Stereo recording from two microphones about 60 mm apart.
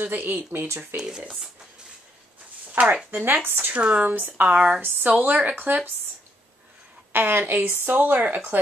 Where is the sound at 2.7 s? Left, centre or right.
Right.